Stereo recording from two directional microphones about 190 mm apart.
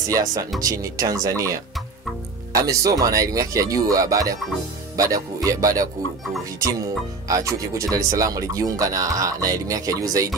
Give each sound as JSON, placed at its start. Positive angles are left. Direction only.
{"t": 0.6, "sound": "speech", "side_deg": -15}
{"t": 7.2, "sound": "speech", "side_deg": -15}